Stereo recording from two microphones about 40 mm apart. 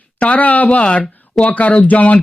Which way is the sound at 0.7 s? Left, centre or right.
Left.